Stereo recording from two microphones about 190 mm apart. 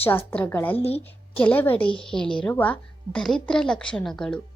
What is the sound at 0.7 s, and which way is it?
Speech, 30° left (ahead or behind).